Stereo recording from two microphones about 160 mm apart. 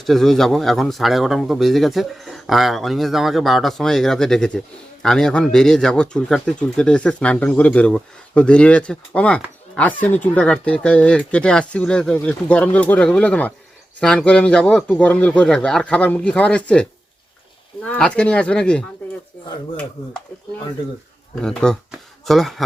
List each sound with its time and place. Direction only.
0.0 s speech: centre (ahead or behind)
21.4 s speech: 5° left (ahead or behind)